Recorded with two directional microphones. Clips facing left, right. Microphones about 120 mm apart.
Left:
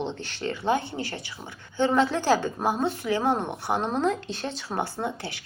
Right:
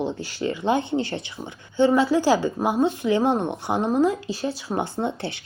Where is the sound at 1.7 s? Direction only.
10° right (ahead or behind).